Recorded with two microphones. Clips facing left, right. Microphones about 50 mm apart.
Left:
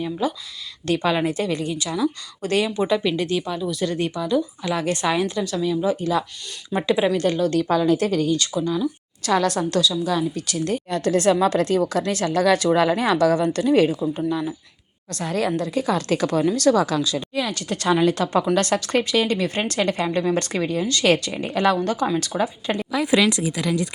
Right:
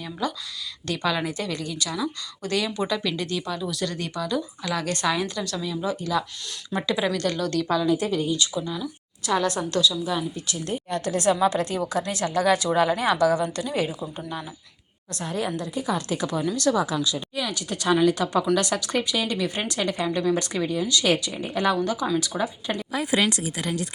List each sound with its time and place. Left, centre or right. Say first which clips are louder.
0.0 s speech: left 5 dB; centre
0.9 s a woman's voice: left 5 dB; left
2.6 s a woman's voice: left 5 dB; centre
3.6 s a woman's voice: left 5 dB; centre
7.5 s a woman's voice: left 4 dB; left
7.9 s speech: left 4 dB; left
9.2 s a woman's voice: left 4 dB; left
9.7 s speech: left 2 dB; left
10.1 s a woman's voice: left 5 dB; left
11.3 s speech: left 4 dB; left
15.1 s a woman's voice: left 5 dB; left
16.4 s speech: left 5 dB; left
16.8 s speech: left 4 dB; left
22.3 s a woman's voice: left 4 dB; centre